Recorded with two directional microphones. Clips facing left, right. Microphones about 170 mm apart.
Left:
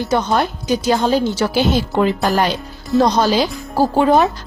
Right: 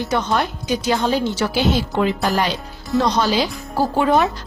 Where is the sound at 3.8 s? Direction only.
35° left (ahead or behind).